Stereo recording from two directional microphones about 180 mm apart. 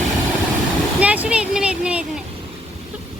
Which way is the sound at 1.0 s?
5° right (ahead or behind).